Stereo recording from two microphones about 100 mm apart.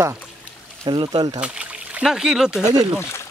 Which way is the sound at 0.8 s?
50° right (ahead or behind).